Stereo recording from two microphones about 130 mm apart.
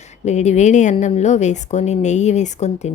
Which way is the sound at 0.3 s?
65° left (ahead or behind).